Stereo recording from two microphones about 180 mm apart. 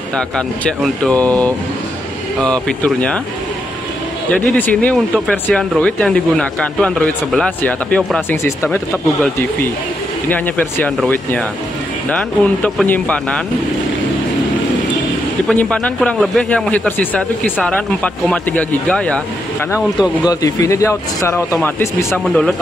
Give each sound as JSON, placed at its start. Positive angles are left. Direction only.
{"t": 0.7, "sound": "speech", "side_deg": 5}
{"t": 4.3, "sound": "speech", "side_deg": 10}
{"t": 10.3, "sound": "speech", "side_deg": 10}
{"t": 15.4, "sound": "speech", "side_deg": 5}
{"t": 20.2, "sound": "speech", "side_deg": 20}